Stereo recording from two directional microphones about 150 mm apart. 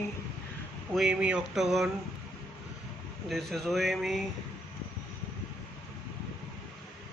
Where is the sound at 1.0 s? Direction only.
5° right (ahead or behind).